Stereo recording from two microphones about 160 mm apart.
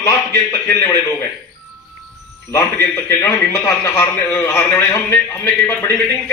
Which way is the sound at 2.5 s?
15° left (ahead or behind).